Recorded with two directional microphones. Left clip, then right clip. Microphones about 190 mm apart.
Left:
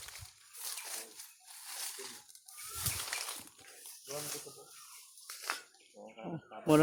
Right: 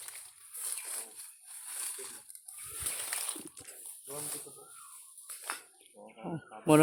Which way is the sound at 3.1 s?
10° right (ahead or behind).